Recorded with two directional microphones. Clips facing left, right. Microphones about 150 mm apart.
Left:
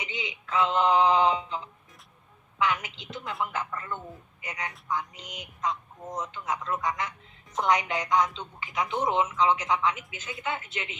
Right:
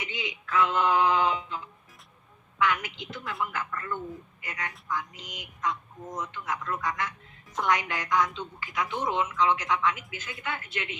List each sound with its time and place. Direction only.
0.0 s a woman's voice: 20° left (ahead or behind)